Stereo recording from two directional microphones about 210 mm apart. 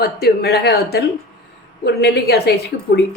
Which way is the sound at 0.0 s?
50° left (ahead or behind).